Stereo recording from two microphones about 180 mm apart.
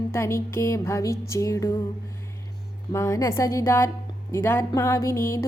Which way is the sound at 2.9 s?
15° left (ahead or behind).